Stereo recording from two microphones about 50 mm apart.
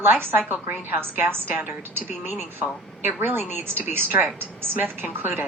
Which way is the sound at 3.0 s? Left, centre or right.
Right.